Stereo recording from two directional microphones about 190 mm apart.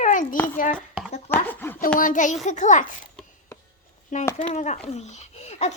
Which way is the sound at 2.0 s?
40° left (ahead or behind).